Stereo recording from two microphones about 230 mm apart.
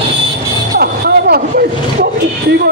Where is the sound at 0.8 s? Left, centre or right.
Right.